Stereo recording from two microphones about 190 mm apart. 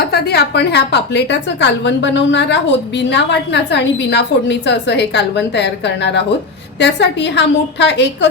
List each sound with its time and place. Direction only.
0.1 s a woman's voice: 60° left (ahead or behind)